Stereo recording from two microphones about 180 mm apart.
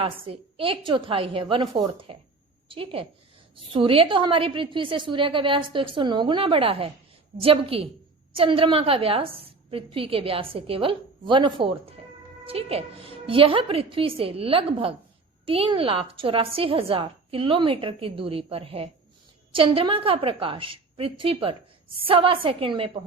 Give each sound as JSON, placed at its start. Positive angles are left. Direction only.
{"t": 0.0, "sound": "a woman's voice", "side_deg": -30}